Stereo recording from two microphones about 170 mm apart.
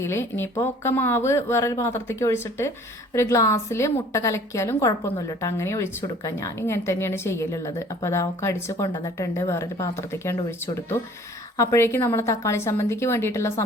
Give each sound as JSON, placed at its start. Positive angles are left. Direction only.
{"t": 0.0, "sound": "speech", "side_deg": 15}
{"t": 11.5, "sound": "speech", "side_deg": 20}